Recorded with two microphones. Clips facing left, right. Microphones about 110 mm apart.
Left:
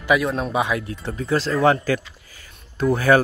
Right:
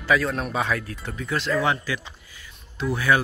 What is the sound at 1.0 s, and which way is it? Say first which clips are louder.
Speech: left 5 dB; 35° left (ahead or behind).